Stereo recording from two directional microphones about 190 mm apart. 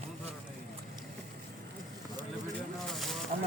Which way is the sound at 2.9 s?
Centre (ahead or behind).